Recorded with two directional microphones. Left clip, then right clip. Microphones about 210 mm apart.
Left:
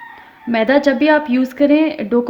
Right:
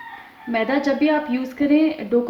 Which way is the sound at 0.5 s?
50° left (ahead or behind).